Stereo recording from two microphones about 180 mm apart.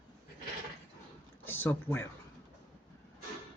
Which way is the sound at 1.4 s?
10° left (ahead or behind).